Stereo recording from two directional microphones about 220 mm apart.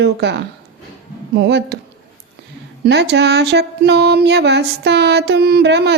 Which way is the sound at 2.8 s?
50° right (ahead or behind).